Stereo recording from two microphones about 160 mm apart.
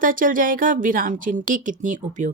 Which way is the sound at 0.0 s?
55° right (ahead or behind).